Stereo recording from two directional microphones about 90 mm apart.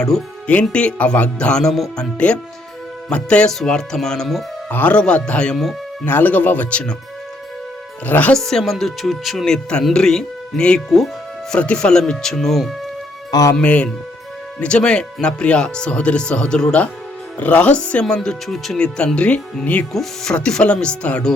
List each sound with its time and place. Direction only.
0.0 s speech: 10° left (ahead or behind)
4.7 s speech: 20° left (ahead or behind)
4.9 s speech: 10° left (ahead or behind)
6.1 s speech: 20° left (ahead or behind)
8.0 s speech: 20° left (ahead or behind)
8.3 s speech: 5° left (ahead or behind)
11.5 s speech: 10° left (ahead or behind)
13.6 s speech: 15° left (ahead or behind)
19.9 s speech: 5° left (ahead or behind)